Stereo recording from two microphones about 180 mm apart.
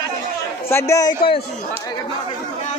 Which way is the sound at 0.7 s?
15° left (ahead or behind).